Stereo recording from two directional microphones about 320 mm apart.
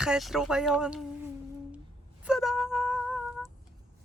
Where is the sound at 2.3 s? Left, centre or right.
Centre.